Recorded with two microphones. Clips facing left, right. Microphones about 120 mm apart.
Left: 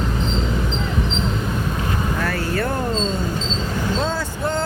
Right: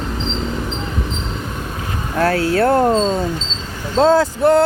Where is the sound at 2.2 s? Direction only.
75° right (ahead or behind).